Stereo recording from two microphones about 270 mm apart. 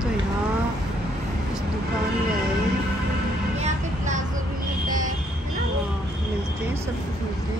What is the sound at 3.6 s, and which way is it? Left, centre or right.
Vehicle, right.